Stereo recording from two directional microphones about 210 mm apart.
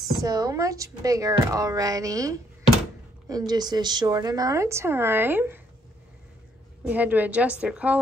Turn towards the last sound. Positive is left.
turn(degrees=-5)  # may be behind; listen again after turning